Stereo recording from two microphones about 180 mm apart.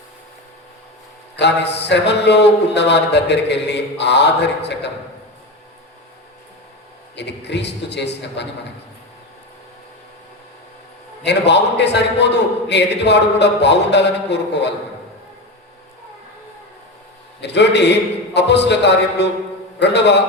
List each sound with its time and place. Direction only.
1.4 s speech: 70° left (ahead or behind)
7.2 s speech: 70° left (ahead or behind)
11.2 s speech: 70° left (ahead or behind)
17.4 s speech: 70° left (ahead or behind)